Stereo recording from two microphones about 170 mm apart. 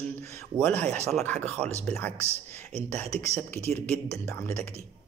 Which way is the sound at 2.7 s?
40° right (ahead or behind).